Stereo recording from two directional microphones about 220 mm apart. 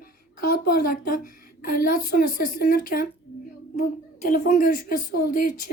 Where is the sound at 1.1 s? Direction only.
40° left (ahead or behind).